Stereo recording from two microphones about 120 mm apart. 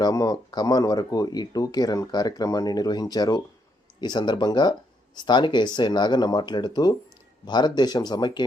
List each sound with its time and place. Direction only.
0.0 s speech: 30° left (ahead or behind)